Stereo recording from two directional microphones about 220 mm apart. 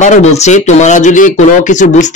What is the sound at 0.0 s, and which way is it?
Speech, 30° left (ahead or behind).